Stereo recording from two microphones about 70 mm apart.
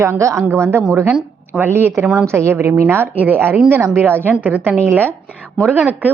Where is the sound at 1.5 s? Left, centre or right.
Right.